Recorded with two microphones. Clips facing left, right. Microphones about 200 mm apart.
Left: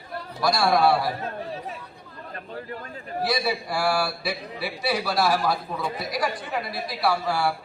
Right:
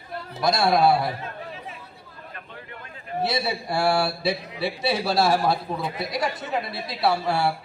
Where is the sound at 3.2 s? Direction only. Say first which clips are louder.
Left 1 dB; 25° right (ahead or behind).